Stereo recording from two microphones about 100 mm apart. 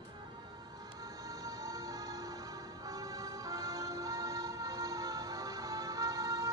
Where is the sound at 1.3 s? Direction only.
35° right (ahead or behind).